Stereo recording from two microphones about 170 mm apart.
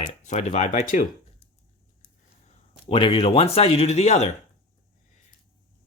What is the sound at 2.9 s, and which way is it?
Speech, 35° left (ahead or behind).